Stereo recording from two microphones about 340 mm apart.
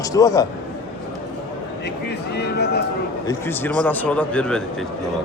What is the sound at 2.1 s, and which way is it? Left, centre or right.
Speech, left.